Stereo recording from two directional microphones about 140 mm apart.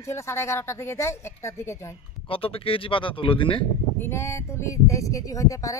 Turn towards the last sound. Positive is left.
turn(degrees=25)  # may be behind; listen again after turning